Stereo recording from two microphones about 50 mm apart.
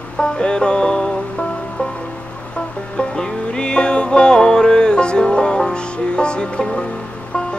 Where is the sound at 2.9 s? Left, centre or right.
Centre.